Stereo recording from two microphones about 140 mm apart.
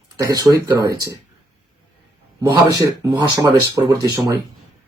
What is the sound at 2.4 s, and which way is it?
Speech, 25° right (ahead or behind).